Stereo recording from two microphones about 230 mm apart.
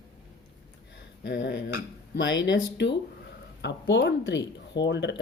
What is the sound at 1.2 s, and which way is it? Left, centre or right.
Speech, left.